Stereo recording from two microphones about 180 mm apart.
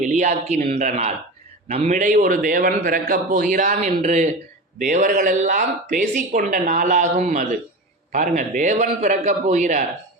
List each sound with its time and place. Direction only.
0.0 s a man's voice: 45° right (ahead or behind)